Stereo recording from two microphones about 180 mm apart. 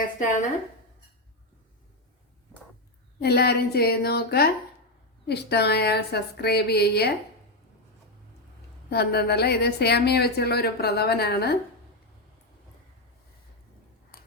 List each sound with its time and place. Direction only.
3.2 s a woman's voice: 65° left (ahead or behind)
8.9 s a woman's voice: 65° left (ahead or behind)